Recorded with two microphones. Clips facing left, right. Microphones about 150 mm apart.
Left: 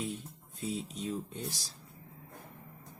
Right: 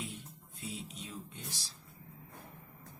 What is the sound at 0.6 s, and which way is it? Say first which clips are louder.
Speech: left 8 dB; 40° left (ahead or behind).